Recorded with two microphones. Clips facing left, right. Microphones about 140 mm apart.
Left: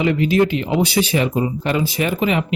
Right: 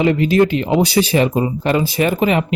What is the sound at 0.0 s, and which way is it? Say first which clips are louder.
Speech: right 3 dB; 35° right (ahead or behind).